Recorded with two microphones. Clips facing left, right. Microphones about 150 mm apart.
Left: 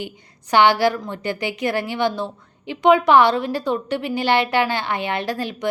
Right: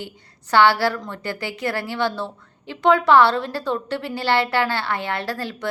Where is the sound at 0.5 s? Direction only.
15° left (ahead or behind).